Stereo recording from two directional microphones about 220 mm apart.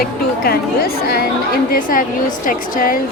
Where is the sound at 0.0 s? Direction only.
45° left (ahead or behind).